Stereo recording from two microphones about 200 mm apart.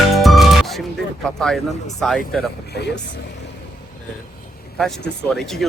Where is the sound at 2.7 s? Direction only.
55° left (ahead or behind).